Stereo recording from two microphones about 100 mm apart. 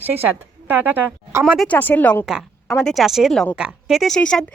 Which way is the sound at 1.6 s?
15° left (ahead or behind).